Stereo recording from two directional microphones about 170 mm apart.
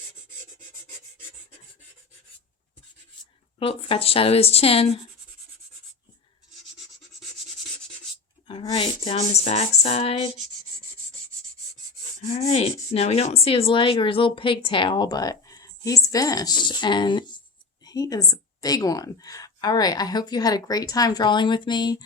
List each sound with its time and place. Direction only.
3.6 s speech: 35° left (ahead or behind)
8.4 s speech: 30° left (ahead or behind)
12.5 s speech: 35° left (ahead or behind)